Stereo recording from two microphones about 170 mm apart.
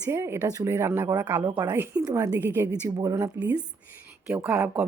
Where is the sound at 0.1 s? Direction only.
15° right (ahead or behind).